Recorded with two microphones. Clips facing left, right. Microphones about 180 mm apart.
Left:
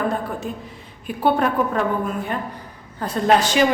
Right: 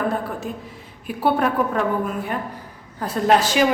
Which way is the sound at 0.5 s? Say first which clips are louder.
Left 1 dB; centre (ahead or behind).